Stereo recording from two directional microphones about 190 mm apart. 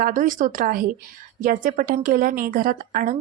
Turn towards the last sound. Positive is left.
turn(degrees=-45)  # may be behind; listen again after turning